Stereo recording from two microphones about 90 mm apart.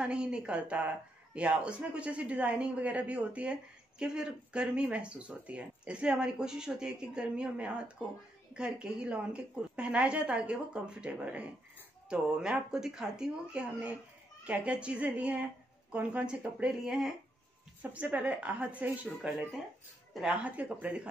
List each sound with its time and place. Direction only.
0.0 s speech: 10° right (ahead or behind)
16.8 s speech: 5° right (ahead or behind)
17.9 s speech: 15° right (ahead or behind)